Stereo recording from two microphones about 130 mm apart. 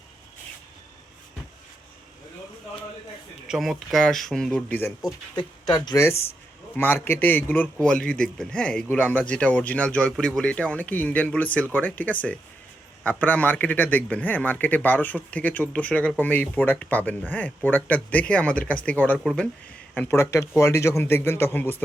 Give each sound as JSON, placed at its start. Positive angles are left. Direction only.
{"t": 3.5, "sound": "speech", "side_deg": 0}
{"t": 5.7, "sound": "speech", "side_deg": 30}
{"t": 6.7, "sound": "speech", "side_deg": 15}
{"t": 19.9, "sound": "a man's voice", "side_deg": 15}